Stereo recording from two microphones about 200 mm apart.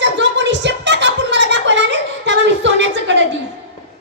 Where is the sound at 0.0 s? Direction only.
65° right (ahead or behind).